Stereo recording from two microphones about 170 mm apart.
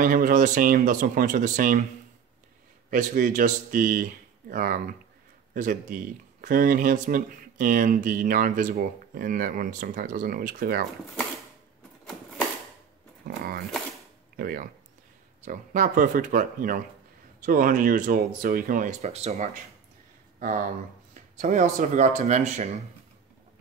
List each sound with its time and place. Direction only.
0.0 s speech: 55° right (ahead or behind)
2.9 s speech: 50° right (ahead or behind)
14.3 s speech: 60° right (ahead or behind)
15.4 s speech: 50° right (ahead or behind)